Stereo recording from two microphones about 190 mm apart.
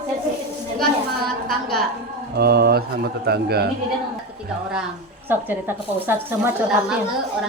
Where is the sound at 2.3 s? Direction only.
55° right (ahead or behind).